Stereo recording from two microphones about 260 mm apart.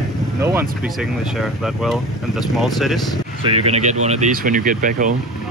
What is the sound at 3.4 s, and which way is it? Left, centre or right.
Speech, right.